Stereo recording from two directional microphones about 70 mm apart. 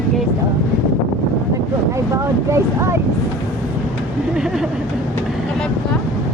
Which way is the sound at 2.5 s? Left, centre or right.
Right.